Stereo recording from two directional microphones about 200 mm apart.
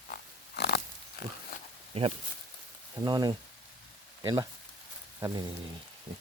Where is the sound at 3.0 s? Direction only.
20° right (ahead or behind).